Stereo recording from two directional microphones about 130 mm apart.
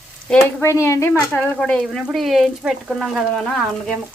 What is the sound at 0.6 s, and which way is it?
A woman's voice, 20° left (ahead or behind).